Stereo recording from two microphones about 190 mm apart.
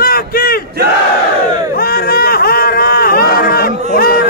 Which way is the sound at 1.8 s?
50° left (ahead or behind).